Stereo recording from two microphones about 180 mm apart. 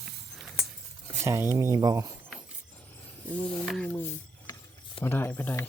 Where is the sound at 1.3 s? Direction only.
15° right (ahead or behind).